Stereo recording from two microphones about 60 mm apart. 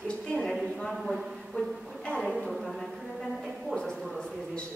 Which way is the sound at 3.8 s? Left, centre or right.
Centre.